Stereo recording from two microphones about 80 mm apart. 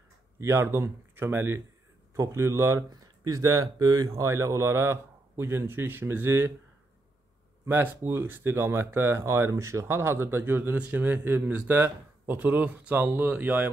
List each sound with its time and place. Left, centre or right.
0.4 s speech: right
2.9 s speech: right
4.1 s speech: right
7.6 s a man's voice: right